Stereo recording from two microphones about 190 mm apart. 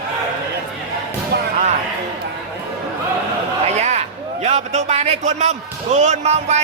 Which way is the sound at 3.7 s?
35° right (ahead or behind).